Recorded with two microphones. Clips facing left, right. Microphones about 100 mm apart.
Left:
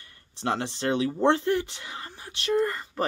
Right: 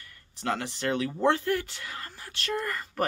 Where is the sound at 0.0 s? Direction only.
30° left (ahead or behind).